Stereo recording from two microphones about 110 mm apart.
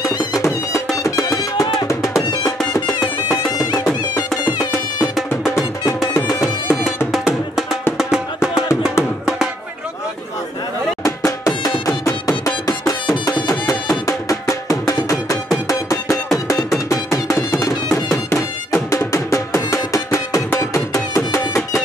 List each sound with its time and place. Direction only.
0.1 s music: 30° left (ahead or behind)
4.6 s music: 35° left (ahead or behind)
5.1 s music: 5° right (ahead or behind)
11.1 s music: 30° left (ahead or behind)